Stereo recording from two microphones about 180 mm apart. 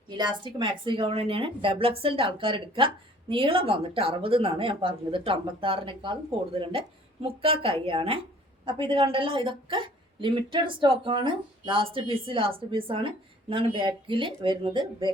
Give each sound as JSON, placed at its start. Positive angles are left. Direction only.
{"t": 0.1, "sound": "a woman's voice", "side_deg": -25}